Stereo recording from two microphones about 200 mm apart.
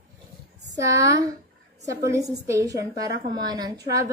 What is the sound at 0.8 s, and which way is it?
Speech, 15° right (ahead or behind).